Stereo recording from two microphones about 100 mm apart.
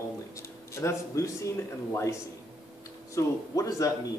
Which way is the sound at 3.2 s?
35° left (ahead or behind).